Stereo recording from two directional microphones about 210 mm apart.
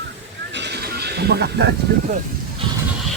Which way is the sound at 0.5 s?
55° right (ahead or behind).